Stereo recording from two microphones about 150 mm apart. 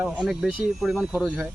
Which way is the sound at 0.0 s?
5° right (ahead or behind).